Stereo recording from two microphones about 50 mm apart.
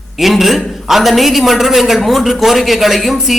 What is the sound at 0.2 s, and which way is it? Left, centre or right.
A man's voice, centre.